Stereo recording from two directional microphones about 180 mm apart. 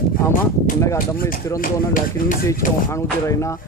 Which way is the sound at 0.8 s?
15° left (ahead or behind).